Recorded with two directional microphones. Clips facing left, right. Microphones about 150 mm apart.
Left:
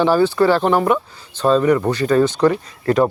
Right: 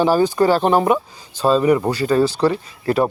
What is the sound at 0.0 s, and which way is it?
Speech, 15° right (ahead or behind).